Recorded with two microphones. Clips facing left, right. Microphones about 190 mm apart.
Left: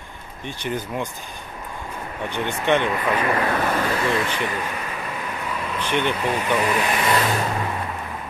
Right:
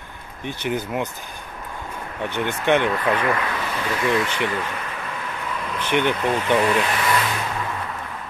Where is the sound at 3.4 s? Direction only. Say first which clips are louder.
Left 5 dB; 45° left (ahead or behind).